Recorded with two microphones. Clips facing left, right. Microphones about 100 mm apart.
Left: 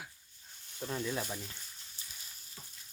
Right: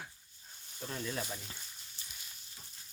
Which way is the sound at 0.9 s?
5° left (ahead or behind).